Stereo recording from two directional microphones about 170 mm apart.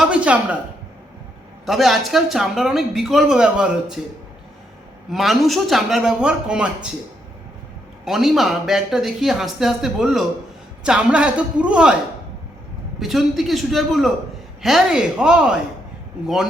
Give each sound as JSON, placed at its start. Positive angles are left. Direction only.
{"t": 0.0, "sound": "a man's voice", "side_deg": -5}
{"t": 1.6, "sound": "speech", "side_deg": 0}
{"t": 5.1, "sound": "speech", "side_deg": 0}
{"t": 8.0, "sound": "a man's voice", "side_deg": 0}
{"t": 13.0, "sound": "speech", "side_deg": 0}